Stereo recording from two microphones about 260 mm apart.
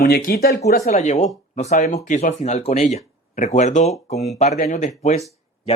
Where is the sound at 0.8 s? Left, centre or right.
Left.